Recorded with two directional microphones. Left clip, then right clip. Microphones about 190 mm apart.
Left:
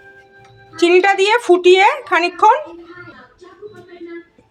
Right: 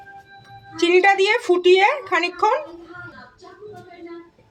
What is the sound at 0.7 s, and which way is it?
A woman's voice, 20° left (ahead or behind).